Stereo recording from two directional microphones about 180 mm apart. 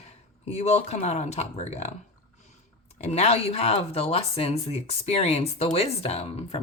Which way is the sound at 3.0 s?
35° left (ahead or behind).